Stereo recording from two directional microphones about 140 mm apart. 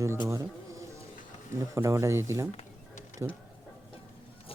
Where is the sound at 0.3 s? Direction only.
20° right (ahead or behind).